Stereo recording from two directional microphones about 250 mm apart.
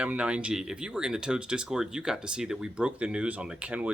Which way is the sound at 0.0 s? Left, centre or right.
Centre.